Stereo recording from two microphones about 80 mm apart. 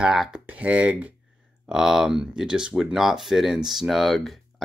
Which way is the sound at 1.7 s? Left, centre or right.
Centre.